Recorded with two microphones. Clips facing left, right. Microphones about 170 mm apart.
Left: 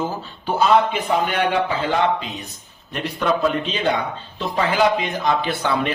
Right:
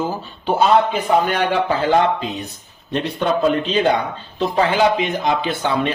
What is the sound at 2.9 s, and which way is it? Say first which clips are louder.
Speech: right 2 dB; 30° right (ahead or behind).